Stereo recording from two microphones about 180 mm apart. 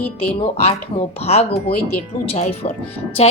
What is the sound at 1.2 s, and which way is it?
Speech, 35° left (ahead or behind).